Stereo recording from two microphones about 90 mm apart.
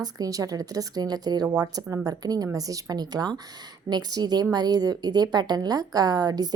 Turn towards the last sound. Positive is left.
turn(degrees=-45)  # may be behind; listen again after turning